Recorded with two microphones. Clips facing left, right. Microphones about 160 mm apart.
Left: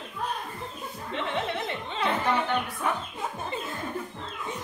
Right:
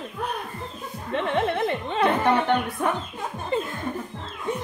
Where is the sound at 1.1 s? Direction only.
55° right (ahead or behind).